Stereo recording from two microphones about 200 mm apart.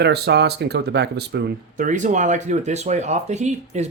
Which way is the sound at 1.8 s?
40° right (ahead or behind).